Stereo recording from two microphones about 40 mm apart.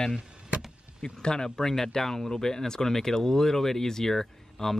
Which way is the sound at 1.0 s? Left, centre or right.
Centre.